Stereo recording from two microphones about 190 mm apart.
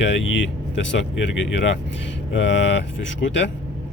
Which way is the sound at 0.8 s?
70° left (ahead or behind).